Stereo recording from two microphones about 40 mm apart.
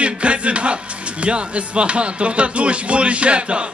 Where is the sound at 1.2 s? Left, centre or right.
Right.